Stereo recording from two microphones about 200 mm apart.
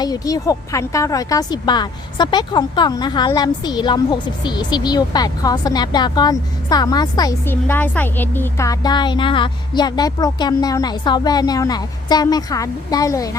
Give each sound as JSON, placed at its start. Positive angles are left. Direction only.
{"t": 0.0, "sound": "speech", "side_deg": 20}